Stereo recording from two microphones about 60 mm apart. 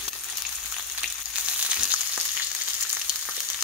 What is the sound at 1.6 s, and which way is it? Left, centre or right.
Frying, centre.